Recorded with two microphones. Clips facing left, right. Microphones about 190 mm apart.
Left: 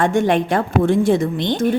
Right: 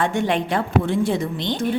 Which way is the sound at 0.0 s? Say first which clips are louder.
Left 5 dB; 45° left (ahead or behind).